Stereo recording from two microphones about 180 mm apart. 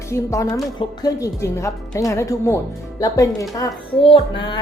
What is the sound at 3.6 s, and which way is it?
A woman's voice, 30° left (ahead or behind).